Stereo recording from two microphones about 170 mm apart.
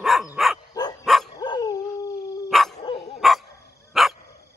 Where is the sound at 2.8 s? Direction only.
35° left (ahead or behind).